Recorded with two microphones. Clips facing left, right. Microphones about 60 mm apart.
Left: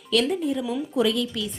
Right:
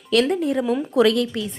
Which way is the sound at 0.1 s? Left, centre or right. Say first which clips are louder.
Right 4 dB; right.